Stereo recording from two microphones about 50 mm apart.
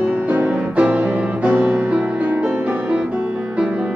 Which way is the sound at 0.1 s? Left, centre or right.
Right.